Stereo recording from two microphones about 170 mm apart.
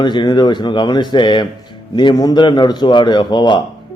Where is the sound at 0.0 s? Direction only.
25° left (ahead or behind).